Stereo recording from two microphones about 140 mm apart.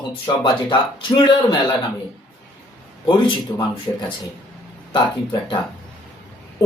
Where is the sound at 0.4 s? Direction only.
35° left (ahead or behind).